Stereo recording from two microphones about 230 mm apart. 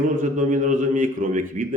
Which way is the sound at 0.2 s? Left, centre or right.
Right.